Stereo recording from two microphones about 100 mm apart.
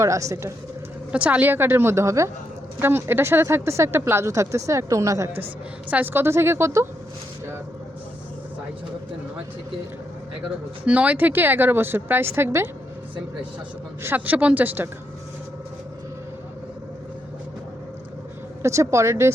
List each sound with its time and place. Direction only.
0.0 s speech: 30° right (ahead or behind)
1.1 s speech: 15° right (ahead or behind); by 5.4 s 30° right (ahead or behind)
5.9 s speech: 20° right (ahead or behind)
10.8 s speech: 15° right (ahead or behind)
14.0 s speech: 20° right (ahead or behind)
18.6 s speech: 30° right (ahead or behind)